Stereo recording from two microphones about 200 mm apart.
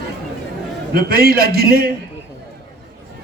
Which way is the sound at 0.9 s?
50° right (ahead or behind).